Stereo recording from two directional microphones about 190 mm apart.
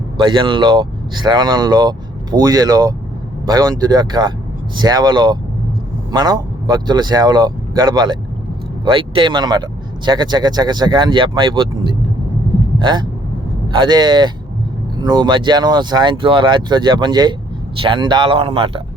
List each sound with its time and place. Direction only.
0.2 s speech: 25° right (ahead or behind)
12.8 s speech: 25° right (ahead or behind)